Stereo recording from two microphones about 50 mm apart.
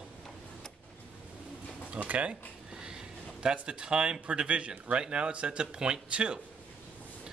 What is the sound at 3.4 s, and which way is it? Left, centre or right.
Speech, centre.